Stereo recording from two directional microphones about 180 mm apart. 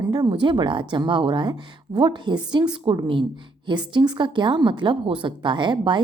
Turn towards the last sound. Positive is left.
turn(degrees=-25)  # may be behind; listen again after turning